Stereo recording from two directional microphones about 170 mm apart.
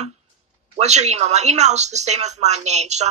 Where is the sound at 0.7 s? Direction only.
40° right (ahead or behind).